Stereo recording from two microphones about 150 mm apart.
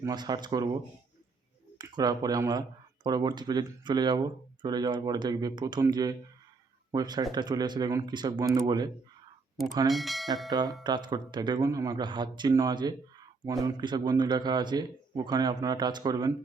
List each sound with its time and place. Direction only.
0.0 s a man's voice: 25° right (ahead or behind)
1.8 s a man's voice: 25° right (ahead or behind)
9.9 s speech: centre (ahead or behind)
10.5 s a man's voice: 25° right (ahead or behind)